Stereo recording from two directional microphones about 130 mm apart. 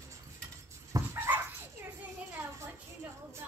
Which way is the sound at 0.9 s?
25° right (ahead or behind).